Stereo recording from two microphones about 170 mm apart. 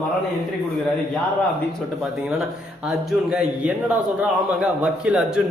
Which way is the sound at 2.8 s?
5° right (ahead or behind).